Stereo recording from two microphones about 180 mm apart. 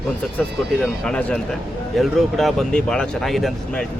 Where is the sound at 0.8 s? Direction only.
5° left (ahead or behind).